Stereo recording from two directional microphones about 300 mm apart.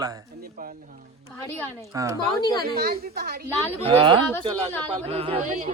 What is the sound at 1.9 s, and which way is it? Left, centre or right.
Speech, centre.